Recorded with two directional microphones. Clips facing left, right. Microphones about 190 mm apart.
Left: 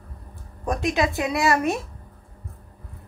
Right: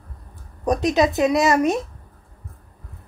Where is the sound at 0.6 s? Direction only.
20° right (ahead or behind).